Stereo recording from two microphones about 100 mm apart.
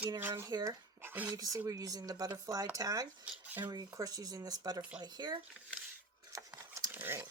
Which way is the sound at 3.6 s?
35° right (ahead or behind).